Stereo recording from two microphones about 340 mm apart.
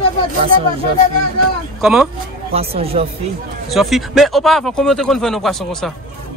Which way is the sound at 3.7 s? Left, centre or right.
Centre.